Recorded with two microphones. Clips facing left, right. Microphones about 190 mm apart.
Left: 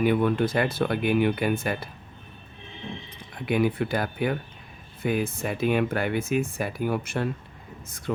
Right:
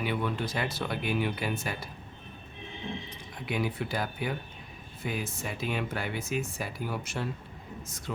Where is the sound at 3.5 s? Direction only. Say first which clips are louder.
Left 8 dB; 55° left (ahead or behind).